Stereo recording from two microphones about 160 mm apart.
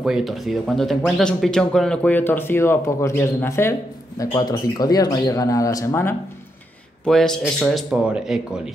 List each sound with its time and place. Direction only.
0.0 s speech: centre (ahead or behind); by 6.1 s 20° left (ahead or behind)
7.1 s speech: 5° left (ahead or behind)